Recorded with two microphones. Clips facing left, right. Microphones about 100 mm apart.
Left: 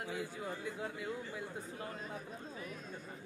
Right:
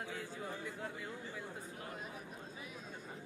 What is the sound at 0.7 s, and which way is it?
Speech, 15° left (ahead or behind).